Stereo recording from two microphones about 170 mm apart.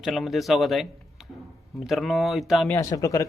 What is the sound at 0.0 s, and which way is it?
A man's voice, centre (ahead or behind).